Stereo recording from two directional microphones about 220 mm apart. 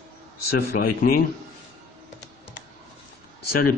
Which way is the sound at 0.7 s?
40° left (ahead or behind).